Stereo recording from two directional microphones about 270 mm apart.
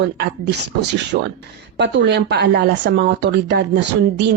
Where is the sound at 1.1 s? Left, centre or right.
Right.